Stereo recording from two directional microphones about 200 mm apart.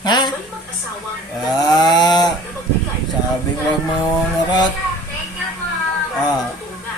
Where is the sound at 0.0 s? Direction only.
20° left (ahead or behind).